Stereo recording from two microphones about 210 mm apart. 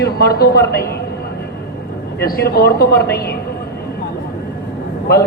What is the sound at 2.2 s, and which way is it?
Speech, 45° left (ahead or behind).